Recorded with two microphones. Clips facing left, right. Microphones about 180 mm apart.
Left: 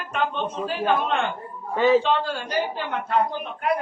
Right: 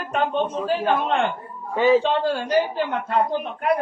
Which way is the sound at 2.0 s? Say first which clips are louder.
Right 3 dB; 40° right (ahead or behind).